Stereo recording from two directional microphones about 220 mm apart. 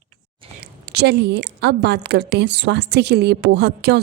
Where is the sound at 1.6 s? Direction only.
50° right (ahead or behind).